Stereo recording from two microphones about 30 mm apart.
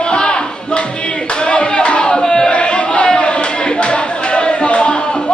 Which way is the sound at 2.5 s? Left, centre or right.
Left.